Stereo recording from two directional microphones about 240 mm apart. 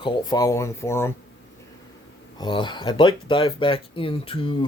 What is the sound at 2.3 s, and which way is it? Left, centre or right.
Speech, centre.